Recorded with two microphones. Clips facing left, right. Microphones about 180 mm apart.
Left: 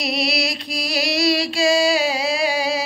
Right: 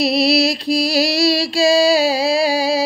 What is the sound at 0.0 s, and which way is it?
Music, 35° right (ahead or behind).